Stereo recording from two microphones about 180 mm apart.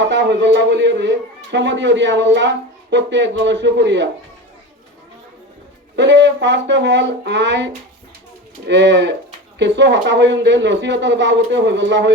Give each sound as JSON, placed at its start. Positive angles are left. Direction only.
{"t": 0.0, "sound": "a man's voice", "side_deg": -75}
{"t": 6.0, "sound": "a man's voice", "side_deg": -80}